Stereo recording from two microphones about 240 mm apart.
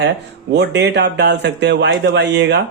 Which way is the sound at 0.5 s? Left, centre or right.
Right.